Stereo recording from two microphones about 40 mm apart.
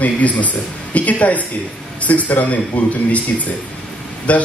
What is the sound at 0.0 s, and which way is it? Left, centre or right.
A man's voice, left.